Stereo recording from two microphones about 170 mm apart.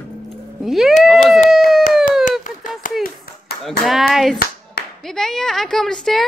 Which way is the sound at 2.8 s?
55° left (ahead or behind).